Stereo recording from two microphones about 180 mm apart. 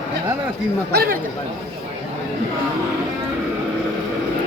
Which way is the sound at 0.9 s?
55° right (ahead or behind).